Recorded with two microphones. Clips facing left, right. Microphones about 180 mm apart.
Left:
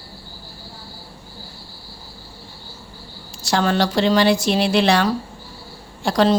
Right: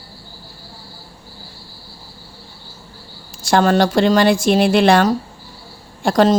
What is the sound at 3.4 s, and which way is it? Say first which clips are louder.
Speech: right 5 dB; 50° right (ahead or behind).